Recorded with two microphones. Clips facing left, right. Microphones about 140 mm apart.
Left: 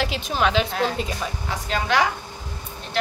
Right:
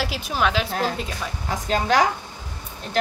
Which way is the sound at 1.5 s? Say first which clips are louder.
Right 3 dB; 40° right (ahead or behind).